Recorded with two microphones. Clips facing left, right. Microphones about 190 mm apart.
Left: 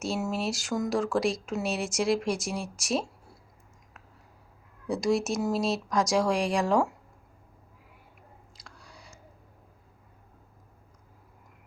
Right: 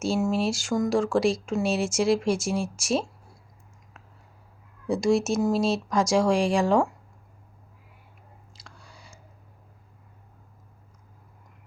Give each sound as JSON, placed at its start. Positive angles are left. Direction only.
{"t": 0.0, "sound": "a woman's voice", "side_deg": 0}
{"t": 4.9, "sound": "a woman's voice", "side_deg": -25}
{"t": 5.3, "sound": "a woman's voice", "side_deg": 0}
{"t": 8.6, "sound": "chewing", "side_deg": 0}